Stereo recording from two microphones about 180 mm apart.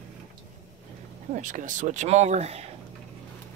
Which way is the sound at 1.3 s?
45° right (ahead or behind).